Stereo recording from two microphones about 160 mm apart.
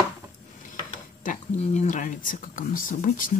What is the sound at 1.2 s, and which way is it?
Speech, 50° left (ahead or behind).